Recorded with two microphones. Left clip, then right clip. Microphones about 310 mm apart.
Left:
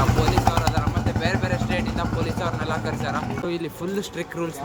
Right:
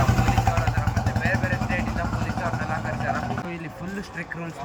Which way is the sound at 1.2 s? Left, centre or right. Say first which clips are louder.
Even; centre.